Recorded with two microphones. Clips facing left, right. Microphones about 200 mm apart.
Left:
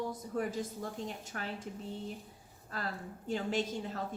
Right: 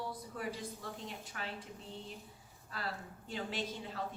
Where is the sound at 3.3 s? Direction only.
45° left (ahead or behind).